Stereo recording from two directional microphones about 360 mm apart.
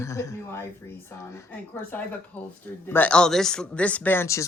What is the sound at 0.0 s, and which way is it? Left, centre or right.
Speech, centre.